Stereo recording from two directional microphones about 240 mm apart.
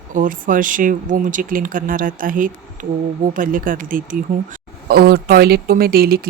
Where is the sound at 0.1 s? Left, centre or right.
Right.